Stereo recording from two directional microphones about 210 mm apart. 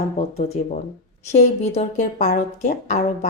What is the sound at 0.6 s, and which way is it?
Speech, 35° left (ahead or behind).